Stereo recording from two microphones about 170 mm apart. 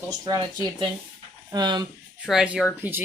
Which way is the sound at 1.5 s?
25° right (ahead or behind).